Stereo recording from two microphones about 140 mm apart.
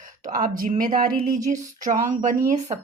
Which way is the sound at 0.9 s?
90° right.